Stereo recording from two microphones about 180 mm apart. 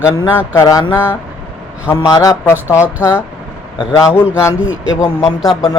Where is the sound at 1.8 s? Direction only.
20° left (ahead or behind).